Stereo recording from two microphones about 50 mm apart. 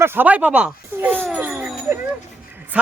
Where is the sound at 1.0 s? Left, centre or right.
Right.